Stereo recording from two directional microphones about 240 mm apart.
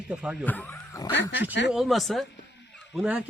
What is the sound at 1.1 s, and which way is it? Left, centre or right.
Speech, left.